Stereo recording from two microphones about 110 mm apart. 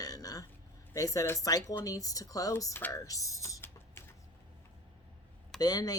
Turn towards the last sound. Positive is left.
turn(degrees=35)  # may be behind; listen again after turning